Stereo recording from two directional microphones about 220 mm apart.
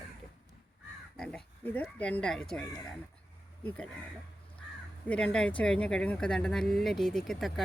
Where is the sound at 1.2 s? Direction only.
5° left (ahead or behind).